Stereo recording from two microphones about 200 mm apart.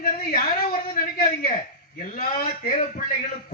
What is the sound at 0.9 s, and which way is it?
A man's voice, 45° left (ahead or behind).